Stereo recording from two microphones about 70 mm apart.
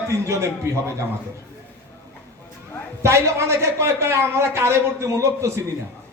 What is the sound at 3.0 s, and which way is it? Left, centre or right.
A man's voice, right.